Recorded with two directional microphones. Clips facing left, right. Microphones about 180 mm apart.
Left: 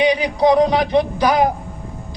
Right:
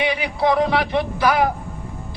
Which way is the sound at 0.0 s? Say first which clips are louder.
Left 5 dB; 20° left (ahead or behind).